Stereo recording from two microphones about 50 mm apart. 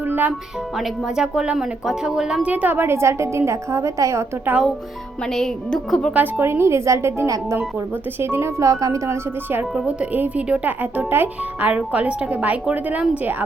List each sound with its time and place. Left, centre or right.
0.1 s music: right
0.8 s speech: centre
2.4 s speech: right
2.8 s a woman's voice: right
5.3 s a woman's voice: centre
6.4 s a woman's voice: right
8.2 s a woman's voice: right
9.8 s speech: right
11.7 s speech: right